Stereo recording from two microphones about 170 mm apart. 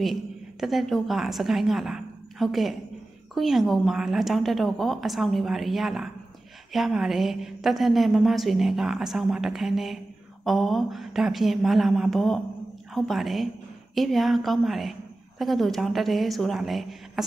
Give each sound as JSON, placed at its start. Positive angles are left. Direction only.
{"t": 0.0, "sound": "a woman's voice", "side_deg": 0}